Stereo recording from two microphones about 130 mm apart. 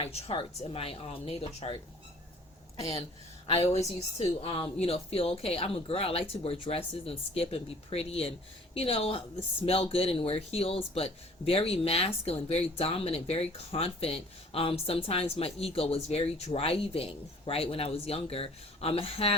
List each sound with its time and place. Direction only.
0.0 s speech: 50° left (ahead or behind)
3.6 s speech: 55° left (ahead or behind)